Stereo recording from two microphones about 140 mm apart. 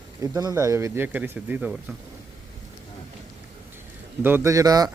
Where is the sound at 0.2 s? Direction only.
25° right (ahead or behind).